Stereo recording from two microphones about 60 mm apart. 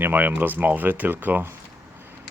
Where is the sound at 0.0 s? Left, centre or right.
Right.